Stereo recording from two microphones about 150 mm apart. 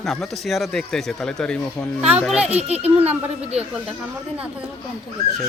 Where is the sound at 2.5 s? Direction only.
45° right (ahead or behind).